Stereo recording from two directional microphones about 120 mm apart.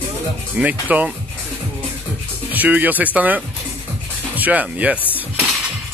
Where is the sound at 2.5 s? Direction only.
15° right (ahead or behind).